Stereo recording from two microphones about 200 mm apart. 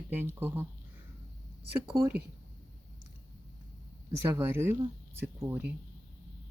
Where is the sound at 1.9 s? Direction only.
10° right (ahead or behind).